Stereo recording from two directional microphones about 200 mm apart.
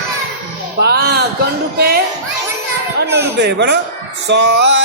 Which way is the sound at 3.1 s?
55° right (ahead or behind).